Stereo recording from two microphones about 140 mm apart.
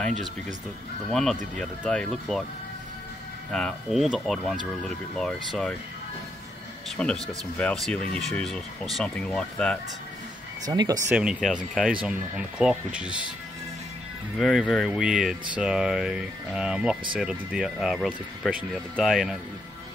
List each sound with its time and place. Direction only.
1.1 s speech: centre (ahead or behind)
3.5 s speech: centre (ahead or behind)
7.0 s speech: 5° left (ahead or behind)
10.6 s speech: 25° right (ahead or behind)
11.1 s speech: 10° right (ahead or behind)
14.4 s speech: centre (ahead or behind)